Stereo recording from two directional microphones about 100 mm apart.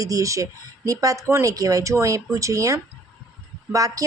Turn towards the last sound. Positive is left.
turn(degrees=-35)  # may be behind; listen again after turning